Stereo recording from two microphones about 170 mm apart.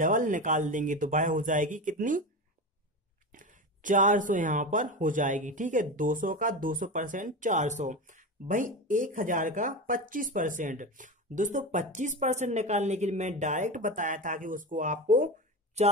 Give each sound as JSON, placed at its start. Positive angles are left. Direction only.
{"t": 0.0, "sound": "speech", "side_deg": -50}
{"t": 3.3, "sound": "speech", "side_deg": -50}